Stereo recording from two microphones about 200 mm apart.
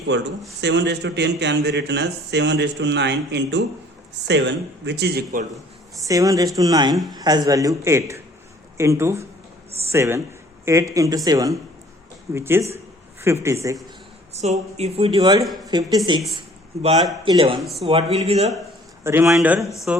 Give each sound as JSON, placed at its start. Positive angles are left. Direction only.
{"t": 0.1, "sound": "speech", "side_deg": -60}
{"t": 6.1, "sound": "a man's voice", "side_deg": -15}
{"t": 14.3, "sound": "speech", "side_deg": -35}
{"t": 17.6, "sound": "a man's voice", "side_deg": 0}
{"t": 17.8, "sound": "speech", "side_deg": -30}
{"t": 19.0, "sound": "a man's voice", "side_deg": -15}